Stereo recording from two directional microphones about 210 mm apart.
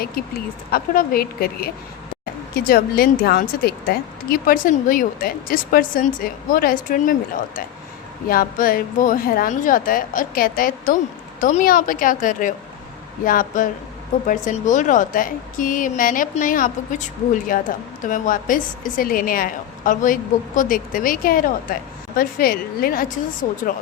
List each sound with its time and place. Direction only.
0.0 s a woman's voice: 45° left (ahead or behind)